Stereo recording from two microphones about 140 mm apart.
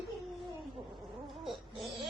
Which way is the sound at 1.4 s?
Centre (ahead or behind).